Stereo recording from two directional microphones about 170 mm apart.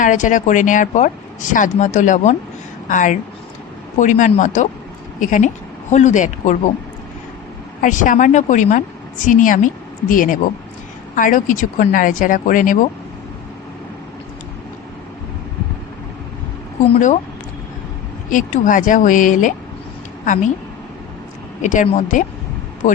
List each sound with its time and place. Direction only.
0.0 s speech: 50° left (ahead or behind)
7.8 s speech: 50° left (ahead or behind)
18.3 s speech: 50° left (ahead or behind)
21.6 s speech: 45° left (ahead or behind)